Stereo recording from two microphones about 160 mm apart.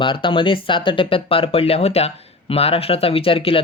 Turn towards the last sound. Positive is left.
turn(degrees=35)  # may be behind; listen again after turning